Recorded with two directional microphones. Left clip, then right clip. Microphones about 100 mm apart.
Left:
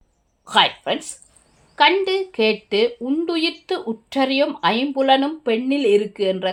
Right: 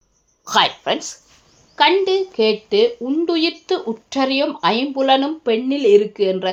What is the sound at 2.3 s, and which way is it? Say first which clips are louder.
Speech: right 1 dB; 10° right (ahead or behind).